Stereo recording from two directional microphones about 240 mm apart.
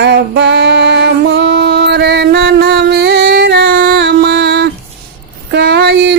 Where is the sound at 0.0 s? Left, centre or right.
Right.